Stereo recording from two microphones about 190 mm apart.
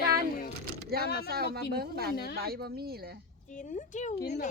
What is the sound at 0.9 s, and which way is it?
Speech, 55° right (ahead or behind).